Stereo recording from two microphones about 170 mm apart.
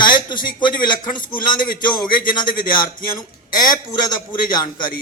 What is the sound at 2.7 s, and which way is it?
Music, 25° left (ahead or behind).